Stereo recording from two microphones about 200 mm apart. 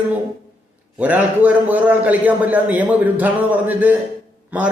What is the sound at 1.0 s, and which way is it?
A man's voice, 10° right (ahead or behind).